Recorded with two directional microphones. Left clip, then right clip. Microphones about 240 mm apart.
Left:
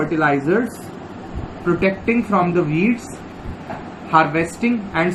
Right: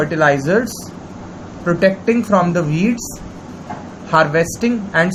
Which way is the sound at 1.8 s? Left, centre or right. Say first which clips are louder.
Right 7 dB; right.